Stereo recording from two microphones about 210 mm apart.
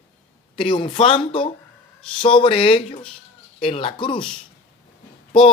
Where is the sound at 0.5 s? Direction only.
25° left (ahead or behind).